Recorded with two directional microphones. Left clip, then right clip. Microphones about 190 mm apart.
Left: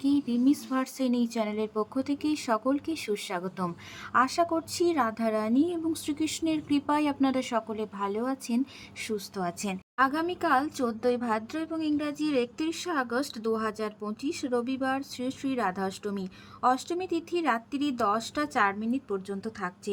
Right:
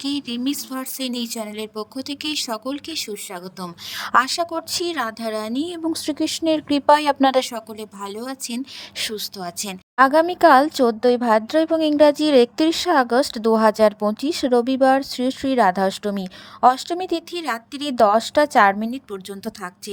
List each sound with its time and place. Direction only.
0.0 s a woman's voice: 50° right (ahead or behind)
1.4 s speech: centre (ahead or behind)
2.0 s a woman's voice: 45° right (ahead or behind)
3.1 s speech: centre (ahead or behind)
3.9 s a woman's voice: 55° right (ahead or behind)
8.0 s speech: 5° left (ahead or behind)
8.3 s a woman's voice: 45° right (ahead or behind)